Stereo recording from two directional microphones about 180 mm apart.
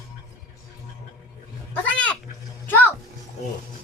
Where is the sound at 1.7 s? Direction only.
5° left (ahead or behind).